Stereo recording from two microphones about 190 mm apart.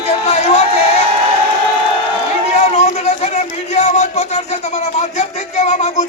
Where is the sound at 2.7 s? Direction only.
35° left (ahead or behind).